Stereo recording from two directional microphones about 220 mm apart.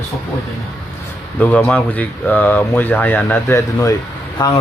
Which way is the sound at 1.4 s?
5° left (ahead or behind).